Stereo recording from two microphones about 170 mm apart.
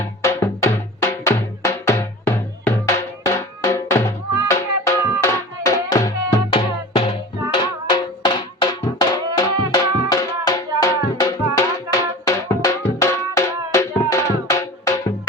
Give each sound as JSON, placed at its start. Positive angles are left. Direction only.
{"t": 0.0, "sound": "music", "side_deg": 15}
{"t": 6.9, "sound": "music", "side_deg": 35}